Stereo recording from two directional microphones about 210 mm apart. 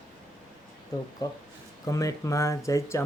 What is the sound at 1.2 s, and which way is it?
Speech, 20° left (ahead or behind).